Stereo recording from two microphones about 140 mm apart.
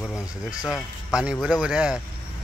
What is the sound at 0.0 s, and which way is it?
Speech, 25° left (ahead or behind).